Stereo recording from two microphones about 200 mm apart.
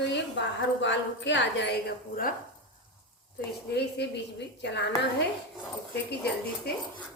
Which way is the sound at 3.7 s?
55° left (ahead or behind).